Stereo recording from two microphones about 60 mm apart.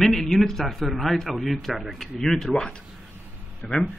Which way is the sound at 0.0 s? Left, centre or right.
Centre.